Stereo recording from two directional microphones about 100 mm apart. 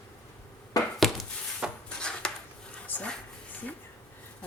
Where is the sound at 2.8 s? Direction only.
20° left (ahead or behind).